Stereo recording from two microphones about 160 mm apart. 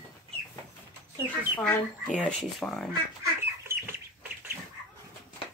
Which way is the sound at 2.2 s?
5° left (ahead or behind).